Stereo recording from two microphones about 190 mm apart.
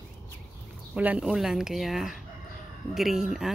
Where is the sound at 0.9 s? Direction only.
5° right (ahead or behind).